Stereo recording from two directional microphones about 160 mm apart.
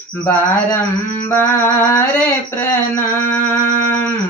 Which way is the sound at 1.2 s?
15° left (ahead or behind).